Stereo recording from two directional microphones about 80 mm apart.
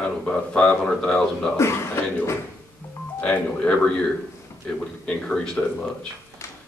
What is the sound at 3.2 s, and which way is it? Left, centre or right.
Speech, centre.